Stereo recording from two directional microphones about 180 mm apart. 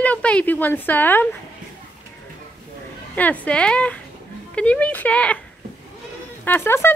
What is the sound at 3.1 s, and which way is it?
Speech, 10° left (ahead or behind).